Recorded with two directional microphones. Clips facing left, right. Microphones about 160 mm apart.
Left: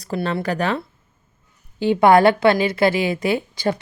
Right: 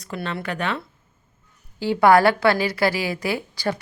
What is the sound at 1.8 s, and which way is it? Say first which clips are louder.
A woman's voice: left 2 dB; 20° left (ahead or behind).